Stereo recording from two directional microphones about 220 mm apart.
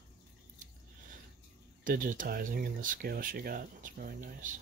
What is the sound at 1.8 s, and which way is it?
Speech, 35° right (ahead or behind).